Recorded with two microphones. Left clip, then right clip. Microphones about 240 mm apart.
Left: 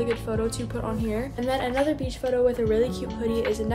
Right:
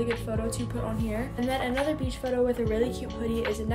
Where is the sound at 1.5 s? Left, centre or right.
Centre.